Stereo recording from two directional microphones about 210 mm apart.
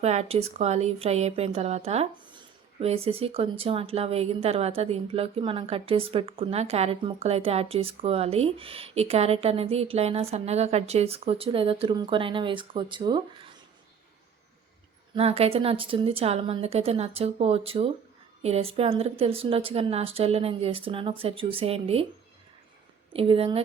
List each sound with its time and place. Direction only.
0.0 s a woman's voice: 30° right (ahead or behind)
15.1 s a woman's voice: 30° right (ahead or behind)
23.1 s a woman's voice: 25° right (ahead or behind)